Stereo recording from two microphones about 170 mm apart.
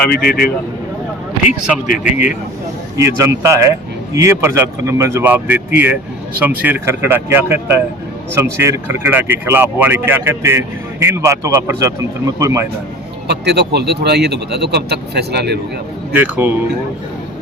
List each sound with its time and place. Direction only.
0.2 s speech: 65° left (ahead or behind)
2.1 s speech: 5° right (ahead or behind)
13.2 s speech: 75° right (ahead or behind)
16.1 s speech: 10° right (ahead or behind)